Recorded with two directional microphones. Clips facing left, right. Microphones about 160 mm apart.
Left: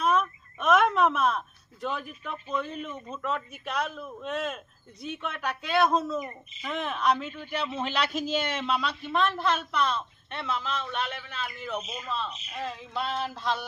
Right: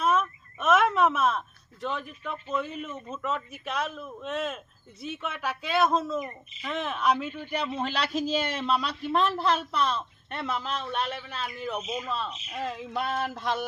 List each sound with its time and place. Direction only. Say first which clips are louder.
0.0 s speech: even; 5° right (ahead or behind)
6.1 s speech: right 1 dB; 10° left (ahead or behind)
6.7 s speech: even; centre (ahead or behind)
7.9 s a man's voice: even; 35° right (ahead or behind)
11.8 s speech: right 2 dB; 10° right (ahead or behind)
13.3 s a sound: right 1 dB; 50° right (ahead or behind)